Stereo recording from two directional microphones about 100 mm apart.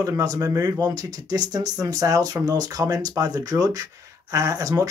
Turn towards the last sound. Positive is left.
turn(degrees=-35)  # may be behind; listen again after turning